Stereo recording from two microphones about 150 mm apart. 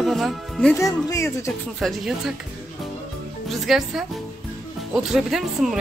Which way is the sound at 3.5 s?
Centre (ahead or behind).